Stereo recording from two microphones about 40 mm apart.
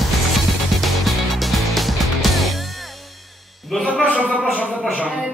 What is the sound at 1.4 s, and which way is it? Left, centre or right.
Music, centre.